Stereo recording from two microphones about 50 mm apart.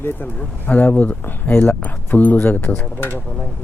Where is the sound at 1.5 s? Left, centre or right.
Left.